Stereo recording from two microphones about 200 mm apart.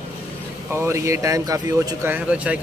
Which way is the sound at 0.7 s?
15° right (ahead or behind).